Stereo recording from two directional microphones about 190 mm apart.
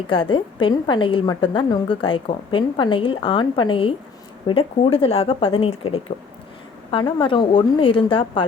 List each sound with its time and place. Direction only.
0.1 s a woman's voice: 25° left (ahead or behind)